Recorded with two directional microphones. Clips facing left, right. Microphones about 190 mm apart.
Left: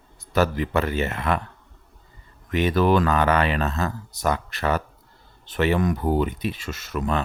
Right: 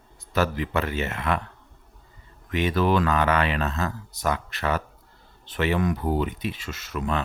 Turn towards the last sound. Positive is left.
turn(degrees=45)  # may be behind; listen again after turning